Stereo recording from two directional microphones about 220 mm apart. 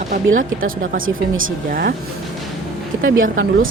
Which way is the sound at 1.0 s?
65° right (ahead or behind).